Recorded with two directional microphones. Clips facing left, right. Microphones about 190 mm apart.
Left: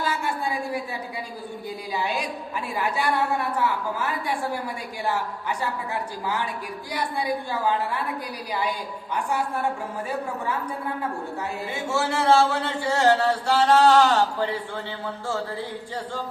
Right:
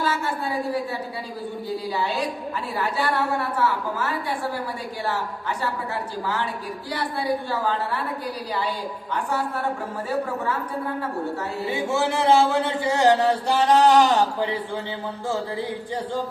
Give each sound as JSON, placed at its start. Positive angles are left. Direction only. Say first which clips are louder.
{"t": 2.0, "sound": "a woman's voice", "louder": "left 1 dB", "side_deg": 15}
{"t": 6.2, "sound": "a woman's voice", "louder": "right 1 dB", "side_deg": 15}
{"t": 11.9, "sound": "a man's voice", "louder": "right 1 dB", "side_deg": -20}